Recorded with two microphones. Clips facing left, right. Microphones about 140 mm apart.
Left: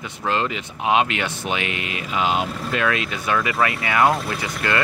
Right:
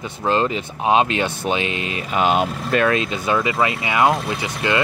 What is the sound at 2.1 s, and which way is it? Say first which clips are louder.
Speech: right 4 dB; 50° right (ahead or behind).